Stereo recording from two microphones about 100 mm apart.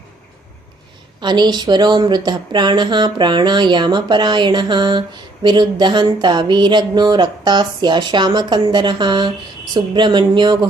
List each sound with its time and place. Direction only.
1.2 s speech: 45° right (ahead or behind)